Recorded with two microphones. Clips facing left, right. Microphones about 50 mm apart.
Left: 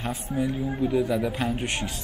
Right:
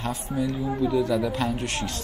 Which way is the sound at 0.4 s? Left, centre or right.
Left.